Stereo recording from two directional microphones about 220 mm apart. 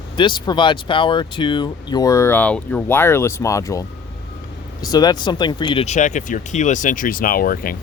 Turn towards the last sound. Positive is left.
turn(degrees=40)  # may be behind; listen again after turning